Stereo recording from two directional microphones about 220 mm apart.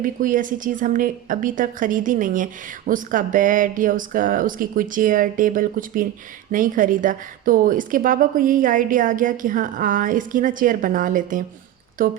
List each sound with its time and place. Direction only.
0.0 s a woman's voice: 40° right (ahead or behind)